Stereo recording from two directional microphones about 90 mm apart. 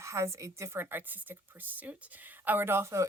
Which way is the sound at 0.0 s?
30° right (ahead or behind).